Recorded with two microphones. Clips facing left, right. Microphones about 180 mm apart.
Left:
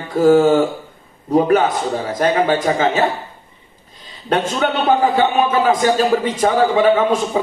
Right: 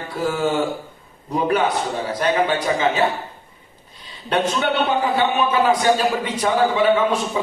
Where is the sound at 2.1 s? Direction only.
45° left (ahead or behind).